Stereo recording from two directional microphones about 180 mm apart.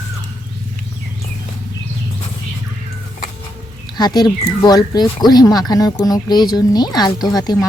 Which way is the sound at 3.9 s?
20° left (ahead or behind).